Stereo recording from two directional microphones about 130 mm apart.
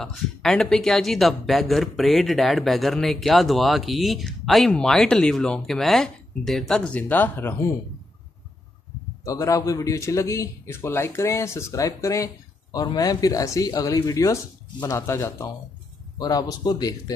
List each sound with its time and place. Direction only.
0.0 s speech: 5° left (ahead or behind)
9.2 s a man's voice: 25° left (ahead or behind)